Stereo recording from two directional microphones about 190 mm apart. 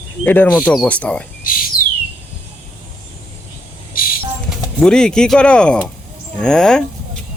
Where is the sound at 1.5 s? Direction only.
50° left (ahead or behind).